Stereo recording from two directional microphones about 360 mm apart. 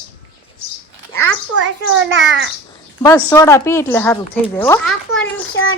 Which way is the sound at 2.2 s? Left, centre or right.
Right.